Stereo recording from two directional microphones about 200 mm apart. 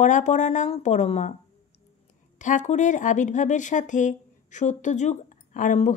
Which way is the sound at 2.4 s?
40° left (ahead or behind).